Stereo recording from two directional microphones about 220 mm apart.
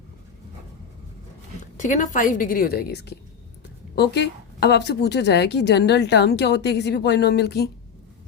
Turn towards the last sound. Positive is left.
turn(degrees=45)  # may be behind; listen again after turning